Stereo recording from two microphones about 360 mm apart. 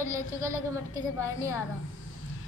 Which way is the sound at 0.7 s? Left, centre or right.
Centre.